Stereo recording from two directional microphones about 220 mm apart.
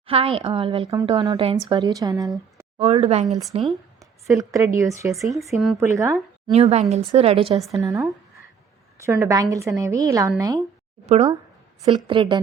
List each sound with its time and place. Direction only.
0.1 s a woman's voice: 25° right (ahead or behind)
4.3 s speech: 15° right (ahead or behind)
6.5 s a woman's voice: 30° right (ahead or behind)
7.7 s speech: 15° right (ahead or behind)
11.0 s a woman's voice: 30° right (ahead or behind)